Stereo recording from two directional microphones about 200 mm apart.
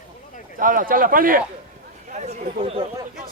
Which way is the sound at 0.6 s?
45° right (ahead or behind).